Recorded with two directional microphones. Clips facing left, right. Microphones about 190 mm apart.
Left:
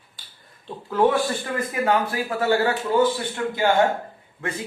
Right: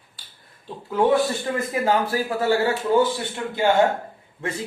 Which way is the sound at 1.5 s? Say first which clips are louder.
Left 1 dB; 25° right (ahead or behind).